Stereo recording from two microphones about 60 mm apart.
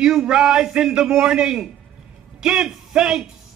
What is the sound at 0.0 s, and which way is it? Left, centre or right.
A man's voice, centre.